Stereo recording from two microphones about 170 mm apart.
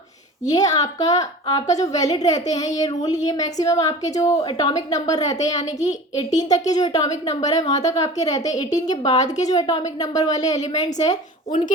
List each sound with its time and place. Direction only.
0.5 s a woman's voice: 20° left (ahead or behind)
9.0 s a woman's voice: 45° left (ahead or behind)
9.6 s a woman's voice: 25° left (ahead or behind)